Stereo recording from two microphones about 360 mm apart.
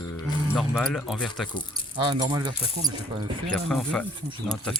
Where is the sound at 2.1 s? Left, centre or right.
Centre.